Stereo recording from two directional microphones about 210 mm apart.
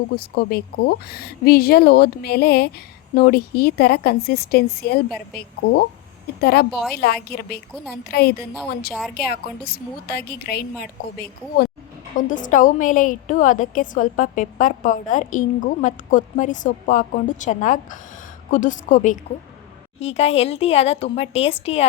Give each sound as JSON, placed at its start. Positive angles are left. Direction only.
{"t": 0.2, "sound": "a woman's voice", "side_deg": 50}
{"t": 8.9, "sound": "speech", "side_deg": 0}
{"t": 9.1, "sound": "a woman's voice", "side_deg": 50}
{"t": 12.1, "sound": "a woman's voice", "side_deg": 40}